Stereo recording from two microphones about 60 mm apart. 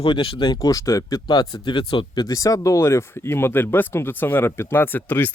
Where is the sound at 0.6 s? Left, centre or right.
Left.